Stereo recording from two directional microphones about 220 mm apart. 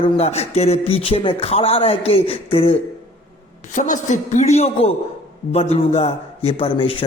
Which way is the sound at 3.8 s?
35° left (ahead or behind).